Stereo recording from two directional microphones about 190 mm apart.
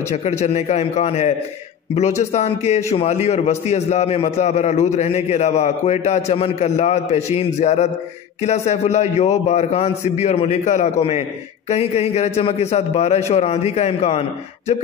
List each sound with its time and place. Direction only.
0.1 s a man's voice: 35° left (ahead or behind)
2.3 s a man's voice: 35° left (ahead or behind)